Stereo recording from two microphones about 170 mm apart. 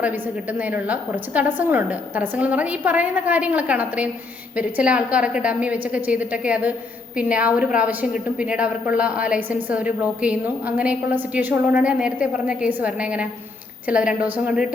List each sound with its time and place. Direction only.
0.0 s a woman's voice: 10° right (ahead or behind)